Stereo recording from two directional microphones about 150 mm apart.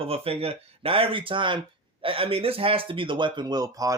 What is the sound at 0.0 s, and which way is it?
Speech, 40° right (ahead or behind).